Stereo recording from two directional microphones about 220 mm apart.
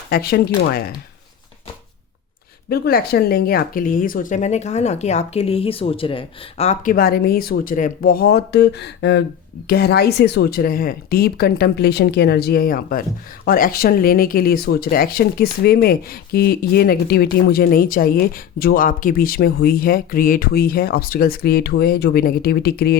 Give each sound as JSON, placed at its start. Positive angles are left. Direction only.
{"t": 0.1, "sound": "speech", "side_deg": 45}
{"t": 2.6, "sound": "speech", "side_deg": 45}